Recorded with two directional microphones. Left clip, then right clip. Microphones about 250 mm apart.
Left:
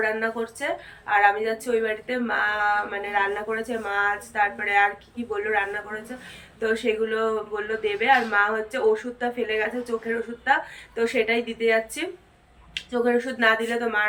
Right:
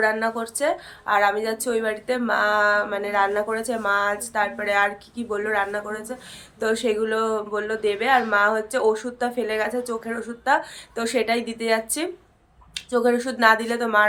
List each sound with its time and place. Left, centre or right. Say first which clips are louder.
0.0 s speech: right 3 dB; centre